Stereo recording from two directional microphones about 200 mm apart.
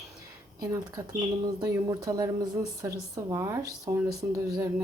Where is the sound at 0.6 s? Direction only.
20° right (ahead or behind).